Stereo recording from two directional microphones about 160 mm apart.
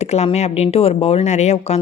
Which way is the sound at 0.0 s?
40° left (ahead or behind).